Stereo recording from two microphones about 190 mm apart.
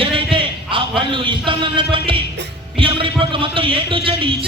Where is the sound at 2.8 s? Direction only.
25° right (ahead or behind).